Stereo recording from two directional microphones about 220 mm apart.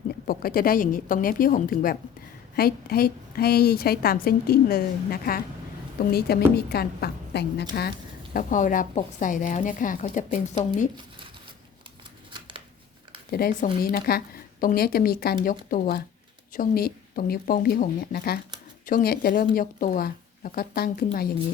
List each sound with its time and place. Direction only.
0.3 s a woman's voice: 40° left (ahead or behind)
12.3 s shuffling cards: 20° right (ahead or behind)
13.3 s a woman's voice: 40° left (ahead or behind)